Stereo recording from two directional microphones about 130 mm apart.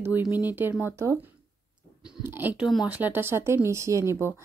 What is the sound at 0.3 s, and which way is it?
Speech, 15° right (ahead or behind).